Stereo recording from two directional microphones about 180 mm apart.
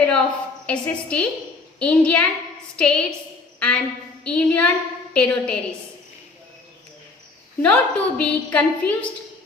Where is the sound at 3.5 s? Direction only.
5° left (ahead or behind).